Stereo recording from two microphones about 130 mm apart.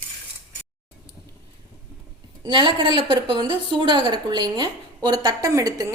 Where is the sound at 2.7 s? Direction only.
40° right (ahead or behind); by 5.9 s 25° right (ahead or behind).